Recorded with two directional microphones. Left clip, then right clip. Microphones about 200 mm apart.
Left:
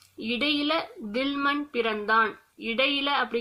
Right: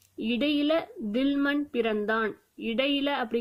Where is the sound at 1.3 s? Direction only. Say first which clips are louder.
Left 3 dB; 45° right (ahead or behind).